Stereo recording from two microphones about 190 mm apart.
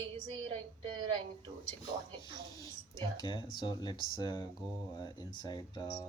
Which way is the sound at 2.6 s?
20° left (ahead or behind).